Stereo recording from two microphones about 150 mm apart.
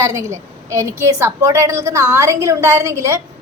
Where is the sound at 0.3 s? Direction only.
20° right (ahead or behind).